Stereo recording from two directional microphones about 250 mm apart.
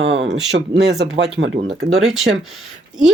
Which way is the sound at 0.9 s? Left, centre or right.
Right.